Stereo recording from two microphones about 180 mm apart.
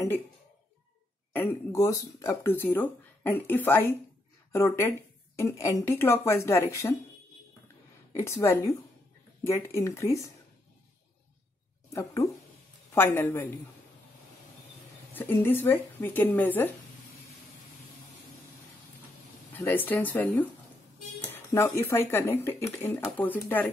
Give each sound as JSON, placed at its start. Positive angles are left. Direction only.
{"t": 1.3, "sound": "speech", "side_deg": 15}
{"t": 8.1, "sound": "speech", "side_deg": 15}
{"t": 11.9, "sound": "speech", "side_deg": 15}
{"t": 15.1, "sound": "speech", "side_deg": 10}
{"t": 19.5, "sound": "speech", "side_deg": 10}